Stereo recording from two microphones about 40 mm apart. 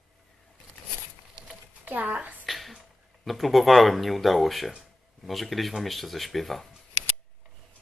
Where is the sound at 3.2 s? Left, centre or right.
Centre.